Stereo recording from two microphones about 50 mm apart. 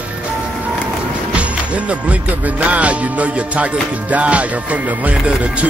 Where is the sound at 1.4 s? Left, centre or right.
Right.